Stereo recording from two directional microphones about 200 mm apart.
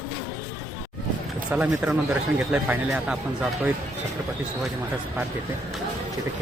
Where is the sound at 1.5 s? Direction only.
5° right (ahead or behind).